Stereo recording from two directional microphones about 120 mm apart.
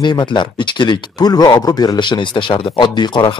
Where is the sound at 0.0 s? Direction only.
40° left (ahead or behind).